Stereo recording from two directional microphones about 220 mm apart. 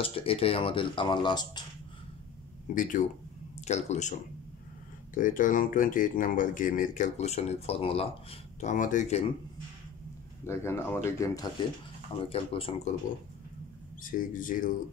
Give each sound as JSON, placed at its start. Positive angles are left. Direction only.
{"t": 0.0, "sound": "speech", "side_deg": 25}
{"t": 2.7, "sound": "speech", "side_deg": 35}
{"t": 5.1, "sound": "speech", "side_deg": 35}
{"t": 10.4, "sound": "speech", "side_deg": 10}
{"t": 12.3, "sound": "speech", "side_deg": 25}
{"t": 14.1, "sound": "speech", "side_deg": 35}